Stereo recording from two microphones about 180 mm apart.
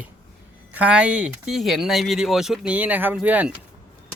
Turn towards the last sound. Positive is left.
turn(degrees=-10)  # may be behind; listen again after turning